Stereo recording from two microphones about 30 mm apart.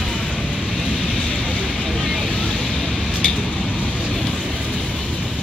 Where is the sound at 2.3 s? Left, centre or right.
Left.